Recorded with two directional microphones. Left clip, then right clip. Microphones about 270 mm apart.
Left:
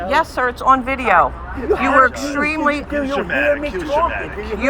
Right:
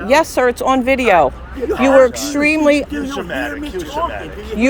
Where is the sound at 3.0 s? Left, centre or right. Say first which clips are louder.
Left 4 dB; centre.